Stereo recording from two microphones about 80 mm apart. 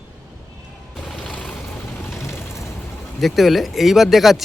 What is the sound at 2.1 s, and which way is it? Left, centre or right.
Vehicle, left.